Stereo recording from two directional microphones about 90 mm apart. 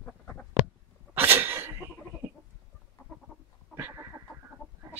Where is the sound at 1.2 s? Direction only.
25° right (ahead or behind).